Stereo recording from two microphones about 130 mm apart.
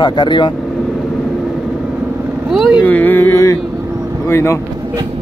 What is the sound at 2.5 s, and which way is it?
Speech, centre (ahead or behind).